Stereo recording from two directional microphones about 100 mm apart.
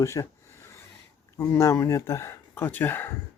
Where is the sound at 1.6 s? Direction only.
30° left (ahead or behind).